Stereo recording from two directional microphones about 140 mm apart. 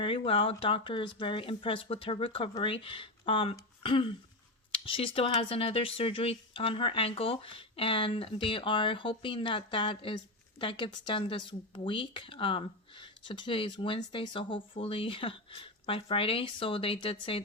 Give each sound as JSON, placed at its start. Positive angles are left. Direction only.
{"t": 0.0, "sound": "speech", "side_deg": 40}